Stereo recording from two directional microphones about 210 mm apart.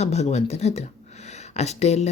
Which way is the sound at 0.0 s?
30° left (ahead or behind).